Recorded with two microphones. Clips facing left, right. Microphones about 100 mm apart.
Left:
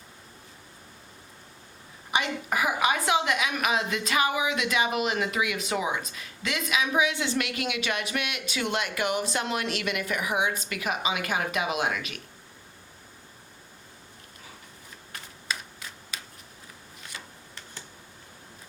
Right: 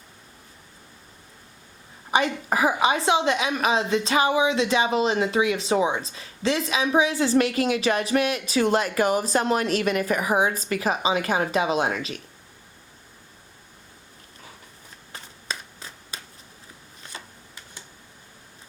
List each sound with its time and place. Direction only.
2.0 s a woman's voice: 35° right (ahead or behind)
15.1 s finger snapping: 30° right (ahead or behind)
17.0 s camera: 35° right (ahead or behind)